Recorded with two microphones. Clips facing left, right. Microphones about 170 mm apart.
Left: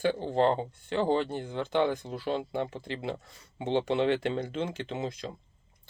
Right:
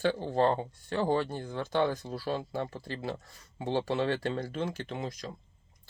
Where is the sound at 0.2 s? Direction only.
20° left (ahead or behind).